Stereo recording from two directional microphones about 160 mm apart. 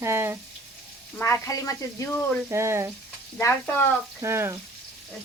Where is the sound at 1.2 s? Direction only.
15° left (ahead or behind).